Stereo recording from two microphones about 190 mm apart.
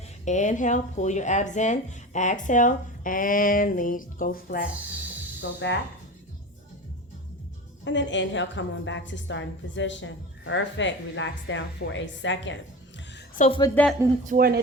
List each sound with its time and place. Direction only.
0.3 s speech: 40° left (ahead or behind)
5.4 s speech: 70° left (ahead or behind)
7.9 s a woman's voice: 75° left (ahead or behind)
13.4 s speech: 40° left (ahead or behind)
13.8 s speech: 10° left (ahead or behind)
14.3 s speech: 50° right (ahead or behind)